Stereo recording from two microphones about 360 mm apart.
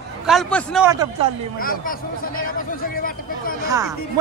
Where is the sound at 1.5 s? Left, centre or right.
Left.